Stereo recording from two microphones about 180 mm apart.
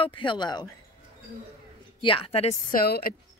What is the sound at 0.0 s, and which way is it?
Speech, 25° left (ahead or behind).